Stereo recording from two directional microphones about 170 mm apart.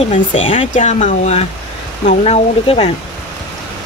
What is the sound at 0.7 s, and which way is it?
Speech, 45° left (ahead or behind).